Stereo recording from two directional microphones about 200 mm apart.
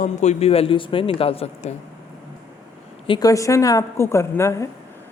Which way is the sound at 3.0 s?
20° left (ahead or behind).